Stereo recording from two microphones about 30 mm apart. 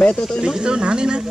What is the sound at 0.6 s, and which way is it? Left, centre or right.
Speech, right.